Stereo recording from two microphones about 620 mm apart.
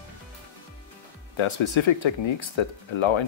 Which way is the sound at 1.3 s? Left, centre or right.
Left.